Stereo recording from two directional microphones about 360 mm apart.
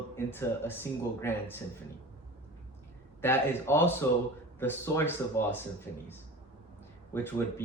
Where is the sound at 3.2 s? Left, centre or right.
Centre.